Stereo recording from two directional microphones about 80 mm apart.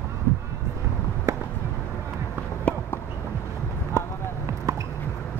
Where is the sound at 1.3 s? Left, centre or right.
Right.